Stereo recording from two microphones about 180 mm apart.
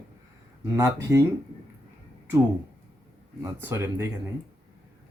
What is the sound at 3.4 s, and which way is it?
Speech, 15° right (ahead or behind).